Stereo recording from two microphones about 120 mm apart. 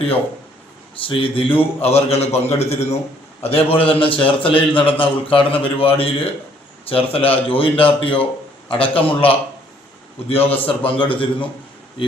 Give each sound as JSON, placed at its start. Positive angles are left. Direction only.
{"t": 1.0, "sound": "a man's voice", "side_deg": 50}